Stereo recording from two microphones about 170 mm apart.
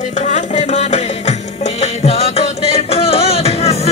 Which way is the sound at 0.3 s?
40° left (ahead or behind).